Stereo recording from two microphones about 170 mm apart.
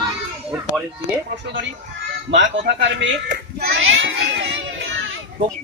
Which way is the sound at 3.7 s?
90° right.